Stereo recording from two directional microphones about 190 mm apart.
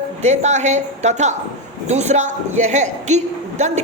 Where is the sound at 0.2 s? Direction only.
35° right (ahead or behind).